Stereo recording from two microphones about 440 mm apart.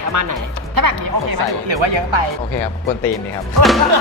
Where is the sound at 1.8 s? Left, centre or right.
Right.